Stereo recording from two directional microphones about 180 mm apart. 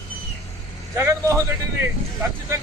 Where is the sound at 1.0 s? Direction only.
15° right (ahead or behind).